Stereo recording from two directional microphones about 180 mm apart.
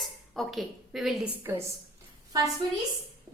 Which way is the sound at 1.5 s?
15° right (ahead or behind).